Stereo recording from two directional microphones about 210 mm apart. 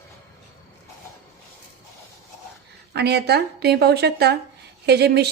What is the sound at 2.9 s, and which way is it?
A woman's voice, 50° right (ahead or behind).